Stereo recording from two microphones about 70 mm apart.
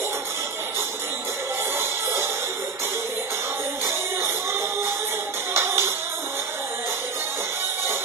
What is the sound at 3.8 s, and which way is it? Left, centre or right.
Music, right.